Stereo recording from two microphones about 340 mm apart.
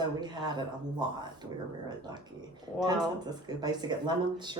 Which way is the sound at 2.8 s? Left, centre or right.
Centre.